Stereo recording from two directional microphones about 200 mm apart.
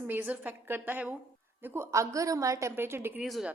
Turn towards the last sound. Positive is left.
turn(degrees=0)  # may be behind; listen again after turning